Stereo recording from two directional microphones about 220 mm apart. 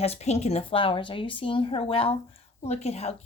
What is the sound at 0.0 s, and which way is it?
A woman's voice, 30° left (ahead or behind).